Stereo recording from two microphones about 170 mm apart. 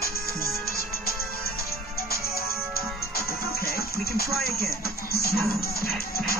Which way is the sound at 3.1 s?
60° left (ahead or behind).